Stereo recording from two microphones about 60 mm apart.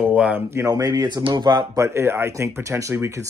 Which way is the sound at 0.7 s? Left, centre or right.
Right.